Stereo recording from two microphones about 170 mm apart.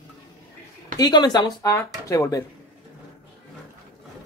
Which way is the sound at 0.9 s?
25° left (ahead or behind).